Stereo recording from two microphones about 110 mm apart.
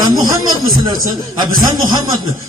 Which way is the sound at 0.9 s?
40° right (ahead or behind).